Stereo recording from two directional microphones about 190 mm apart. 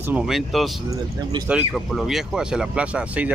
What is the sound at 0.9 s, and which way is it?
Speech, 20° right (ahead or behind).